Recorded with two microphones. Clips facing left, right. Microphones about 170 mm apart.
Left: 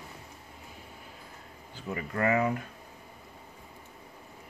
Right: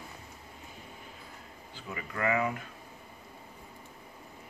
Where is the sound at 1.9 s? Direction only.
40° left (ahead or behind).